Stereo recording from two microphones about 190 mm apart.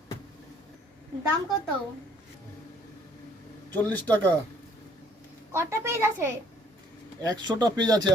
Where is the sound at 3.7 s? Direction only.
10° left (ahead or behind).